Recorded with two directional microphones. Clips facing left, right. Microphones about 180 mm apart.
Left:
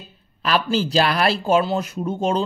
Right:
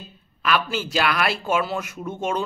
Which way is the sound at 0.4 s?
35° left (ahead or behind).